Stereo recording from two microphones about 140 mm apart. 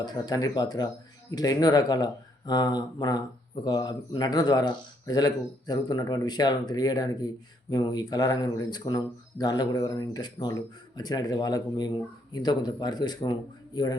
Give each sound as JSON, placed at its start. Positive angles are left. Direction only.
{"t": 0.0, "sound": "speech", "side_deg": 30}